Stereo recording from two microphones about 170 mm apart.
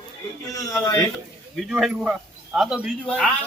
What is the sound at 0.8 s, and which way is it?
Speech, 20° left (ahead or behind).